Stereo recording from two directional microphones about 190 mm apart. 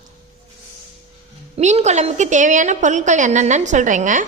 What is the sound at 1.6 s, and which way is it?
A woman's voice, 35° right (ahead or behind).